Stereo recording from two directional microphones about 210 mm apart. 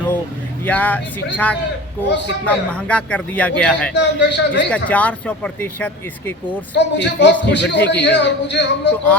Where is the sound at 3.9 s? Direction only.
55° left (ahead or behind).